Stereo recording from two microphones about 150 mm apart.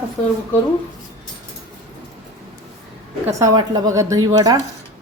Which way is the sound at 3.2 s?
25° right (ahead or behind).